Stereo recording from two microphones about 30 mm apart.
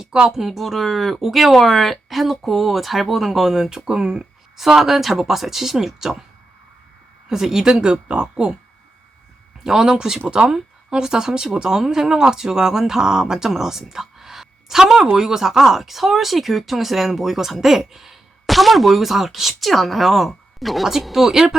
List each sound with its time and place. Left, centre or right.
0.3 s speech: centre
0.6 s speech: centre
3.8 s speech: right
4.5 s speech: centre
7.3 s speech: centre
9.6 s speech: centre
10.2 s speech: right; by 21.5 s centre